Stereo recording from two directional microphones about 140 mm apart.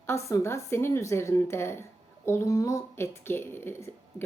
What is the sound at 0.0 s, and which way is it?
Speech, 20° left (ahead or behind).